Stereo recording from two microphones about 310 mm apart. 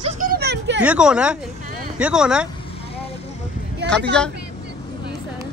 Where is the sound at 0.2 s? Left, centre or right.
Right.